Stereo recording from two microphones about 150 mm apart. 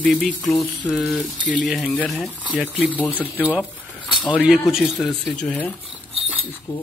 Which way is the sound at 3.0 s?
10° left (ahead or behind).